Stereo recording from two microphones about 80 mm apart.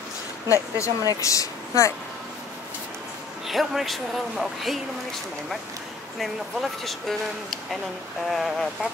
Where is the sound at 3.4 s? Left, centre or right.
Centre.